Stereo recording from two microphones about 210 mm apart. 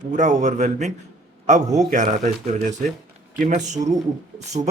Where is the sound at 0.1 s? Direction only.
35° right (ahead or behind).